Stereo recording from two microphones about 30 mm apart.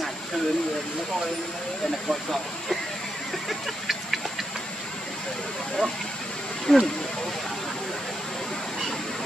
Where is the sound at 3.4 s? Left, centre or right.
Centre.